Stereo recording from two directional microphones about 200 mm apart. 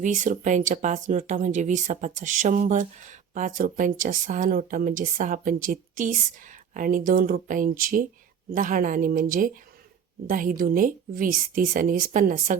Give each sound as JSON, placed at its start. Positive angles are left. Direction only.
{"t": 0.0, "sound": "a woman's voice", "side_deg": -40}